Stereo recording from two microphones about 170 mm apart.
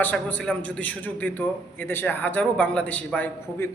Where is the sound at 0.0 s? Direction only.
10° left (ahead or behind).